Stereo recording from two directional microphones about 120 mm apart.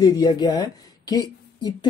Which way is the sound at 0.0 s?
35° left (ahead or behind).